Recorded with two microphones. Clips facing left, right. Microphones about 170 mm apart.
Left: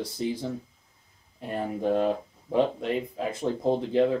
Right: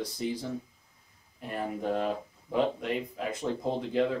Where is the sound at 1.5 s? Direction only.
30° left (ahead or behind).